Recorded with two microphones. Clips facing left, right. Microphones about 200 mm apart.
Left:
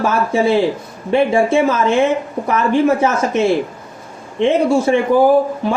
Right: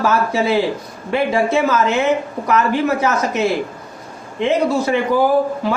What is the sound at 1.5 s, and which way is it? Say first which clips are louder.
Speech: left 2 dB; 30° left (ahead or behind).